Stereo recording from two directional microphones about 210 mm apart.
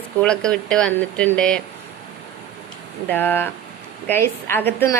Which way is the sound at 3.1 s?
10° left (ahead or behind).